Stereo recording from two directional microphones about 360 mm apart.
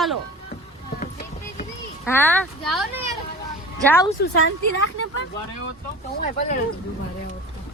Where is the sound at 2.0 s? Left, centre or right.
Centre.